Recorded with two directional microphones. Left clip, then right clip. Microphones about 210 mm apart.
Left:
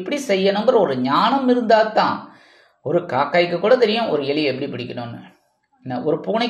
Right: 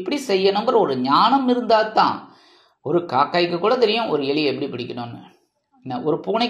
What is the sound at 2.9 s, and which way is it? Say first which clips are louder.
A woman's voice: left 1 dB; 20° right (ahead or behind).